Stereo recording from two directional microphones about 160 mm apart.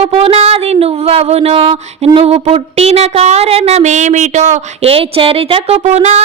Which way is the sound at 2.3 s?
40° right (ahead or behind).